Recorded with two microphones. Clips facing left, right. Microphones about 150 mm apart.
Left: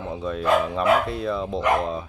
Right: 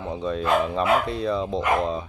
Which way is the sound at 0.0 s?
Centre (ahead or behind).